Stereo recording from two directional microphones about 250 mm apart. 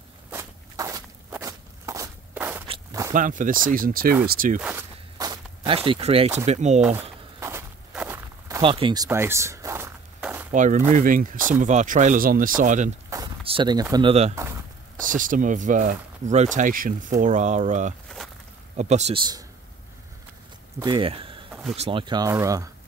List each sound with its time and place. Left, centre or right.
0.3 s walk: centre
3.1 s speech: right
4.6 s speech: centre; by 6.8 s right
7.3 s walk: centre
10.5 s speech: right
13.1 s speech: centre
14.3 s a sound: centre
15.0 s speech: right
18.0 s a sound: centre
18.8 s speech: right
20.8 s speech: centre